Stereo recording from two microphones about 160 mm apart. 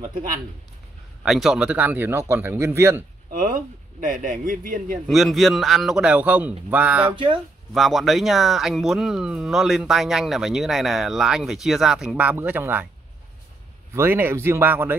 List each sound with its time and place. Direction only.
1.2 s speech: centre (ahead or behind); by 3.0 s 15° right (ahead or behind)
3.3 s speech: 60° right (ahead or behind)
5.0 s speech: centre (ahead or behind)
7.1 s speech: 30° right (ahead or behind)
7.7 s speech: centre (ahead or behind)
13.9 s speech: 15° right (ahead or behind)